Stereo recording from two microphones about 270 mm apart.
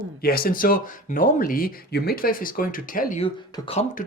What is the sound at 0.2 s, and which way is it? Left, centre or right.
Speech, left.